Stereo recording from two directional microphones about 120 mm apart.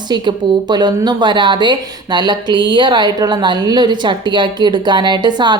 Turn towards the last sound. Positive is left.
turn(degrees=-40)  # may be behind; listen again after turning